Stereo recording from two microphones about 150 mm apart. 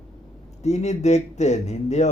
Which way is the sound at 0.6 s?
50° left (ahead or behind).